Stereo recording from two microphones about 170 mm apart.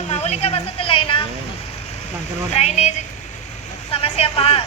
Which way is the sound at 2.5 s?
40° left (ahead or behind).